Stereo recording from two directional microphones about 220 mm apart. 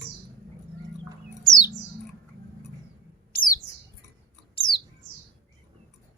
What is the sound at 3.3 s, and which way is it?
Bird, 40° left (ahead or behind).